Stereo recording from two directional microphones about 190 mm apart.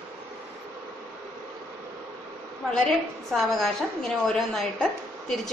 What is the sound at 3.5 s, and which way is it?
A woman's voice, centre (ahead or behind).